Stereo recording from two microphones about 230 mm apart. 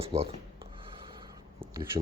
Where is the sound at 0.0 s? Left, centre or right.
Right.